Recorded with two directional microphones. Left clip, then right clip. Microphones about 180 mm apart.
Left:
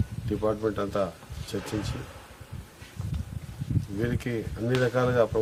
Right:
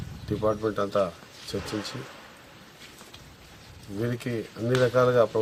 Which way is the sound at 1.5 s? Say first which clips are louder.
Right 1 dB; 20° left (ahead or behind).